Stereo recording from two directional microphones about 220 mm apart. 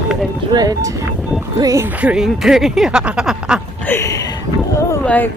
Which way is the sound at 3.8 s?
10° left (ahead or behind).